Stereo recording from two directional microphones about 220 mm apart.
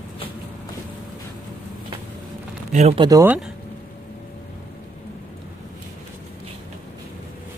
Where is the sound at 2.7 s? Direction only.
25° right (ahead or behind).